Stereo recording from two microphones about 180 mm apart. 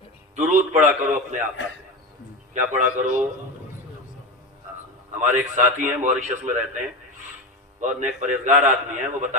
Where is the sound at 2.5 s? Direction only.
45° right (ahead or behind).